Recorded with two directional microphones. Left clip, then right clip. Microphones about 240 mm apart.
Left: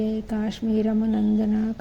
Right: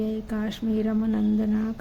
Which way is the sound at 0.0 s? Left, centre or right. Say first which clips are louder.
Left 2 dB; centre.